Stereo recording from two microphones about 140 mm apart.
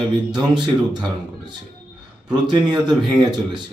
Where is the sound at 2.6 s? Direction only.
30° right (ahead or behind).